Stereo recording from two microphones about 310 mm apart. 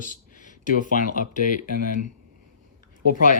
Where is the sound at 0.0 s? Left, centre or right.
Left.